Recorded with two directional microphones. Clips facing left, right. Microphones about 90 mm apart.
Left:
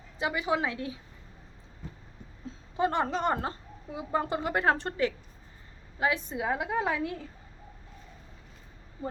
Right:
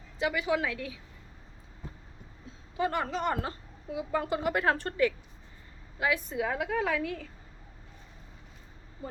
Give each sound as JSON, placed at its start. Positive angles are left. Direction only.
{"t": 0.2, "sound": "a woman's voice", "side_deg": 20}
{"t": 2.7, "sound": "a woman's voice", "side_deg": 25}